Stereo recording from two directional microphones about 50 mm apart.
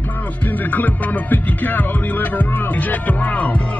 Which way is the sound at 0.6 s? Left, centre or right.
Left.